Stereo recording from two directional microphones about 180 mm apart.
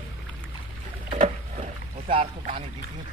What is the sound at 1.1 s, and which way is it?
Rowboat, 40° right (ahead or behind).